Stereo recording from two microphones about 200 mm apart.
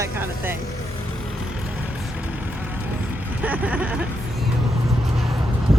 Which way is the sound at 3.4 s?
5° right (ahead or behind).